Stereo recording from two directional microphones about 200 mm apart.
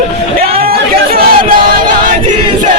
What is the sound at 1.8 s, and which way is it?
Choir, 40° right (ahead or behind).